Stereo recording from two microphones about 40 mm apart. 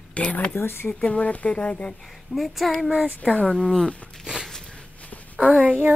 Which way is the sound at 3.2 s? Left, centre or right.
Left.